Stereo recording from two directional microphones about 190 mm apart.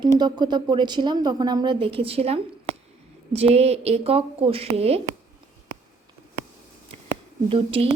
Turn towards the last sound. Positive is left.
turn(degrees=-30)  # may be behind; listen again after turning